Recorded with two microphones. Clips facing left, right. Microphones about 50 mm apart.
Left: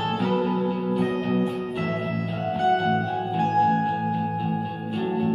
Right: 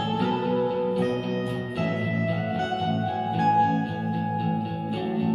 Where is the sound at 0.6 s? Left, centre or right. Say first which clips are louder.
Even; left.